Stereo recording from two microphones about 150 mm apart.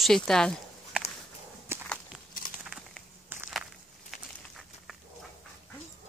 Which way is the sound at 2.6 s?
5° right (ahead or behind).